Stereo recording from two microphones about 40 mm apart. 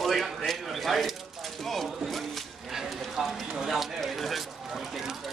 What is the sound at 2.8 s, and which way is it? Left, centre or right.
Speech, centre.